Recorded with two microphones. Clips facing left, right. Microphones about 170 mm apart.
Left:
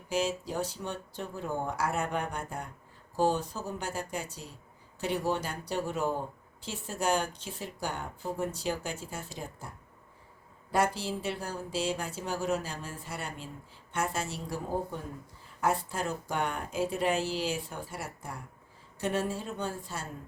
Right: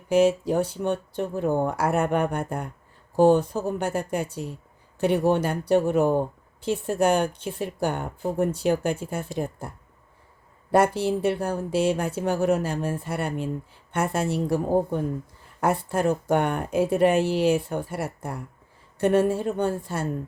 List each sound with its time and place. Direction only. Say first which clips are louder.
0.1 s speech: right 12 dB; 55° right (ahead or behind)
10.7 s speech: right 9 dB; 60° right (ahead or behind)